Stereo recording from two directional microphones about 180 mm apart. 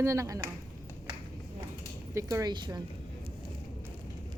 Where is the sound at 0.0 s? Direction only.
15° right (ahead or behind).